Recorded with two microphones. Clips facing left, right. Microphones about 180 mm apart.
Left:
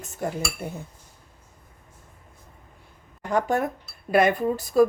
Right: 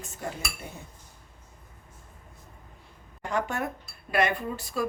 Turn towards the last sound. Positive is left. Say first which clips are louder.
# left 11 dB
turn(degrees=40)  # may be behind; listen again after turning